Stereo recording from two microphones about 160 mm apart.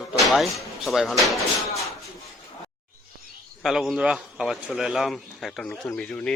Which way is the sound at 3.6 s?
Centre (ahead or behind).